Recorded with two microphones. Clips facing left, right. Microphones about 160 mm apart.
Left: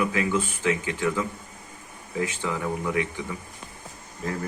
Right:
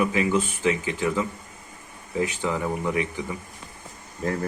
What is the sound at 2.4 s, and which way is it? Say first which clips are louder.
Speech: right 3 dB; 25° right (ahead or behind).